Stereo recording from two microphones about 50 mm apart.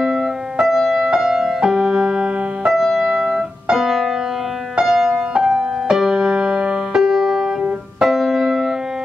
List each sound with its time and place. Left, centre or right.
0.0 s music: centre
2.7 s music: centre
3.3 s keyboard: centre
3.7 s music: centre
8.0 s piano: centre